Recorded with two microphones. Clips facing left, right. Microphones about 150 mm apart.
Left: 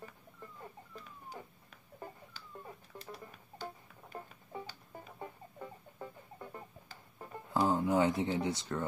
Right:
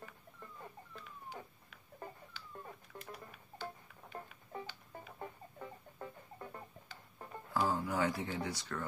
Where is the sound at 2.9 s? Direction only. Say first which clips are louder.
Left 2 dB; 40° left (ahead or behind).